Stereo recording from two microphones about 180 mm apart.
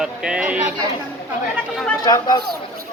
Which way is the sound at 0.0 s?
5° right (ahead or behind).